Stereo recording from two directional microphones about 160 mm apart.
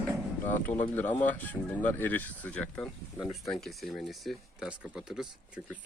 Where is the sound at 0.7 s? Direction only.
10° left (ahead or behind).